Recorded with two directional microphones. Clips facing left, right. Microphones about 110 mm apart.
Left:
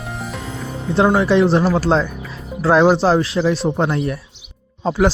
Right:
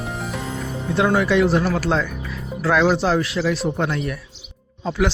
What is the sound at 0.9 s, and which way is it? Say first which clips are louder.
A man's voice: left 4 dB; 30° left (ahead or behind).